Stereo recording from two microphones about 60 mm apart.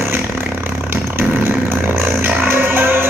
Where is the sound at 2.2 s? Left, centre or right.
Right.